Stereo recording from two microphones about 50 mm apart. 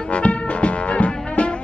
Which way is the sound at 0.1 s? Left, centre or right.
Left.